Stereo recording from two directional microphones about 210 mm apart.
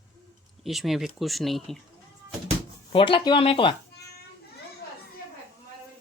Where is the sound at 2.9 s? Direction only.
25° left (ahead or behind).